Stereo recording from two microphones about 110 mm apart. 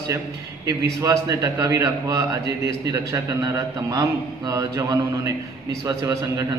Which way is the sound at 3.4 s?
35° right (ahead or behind).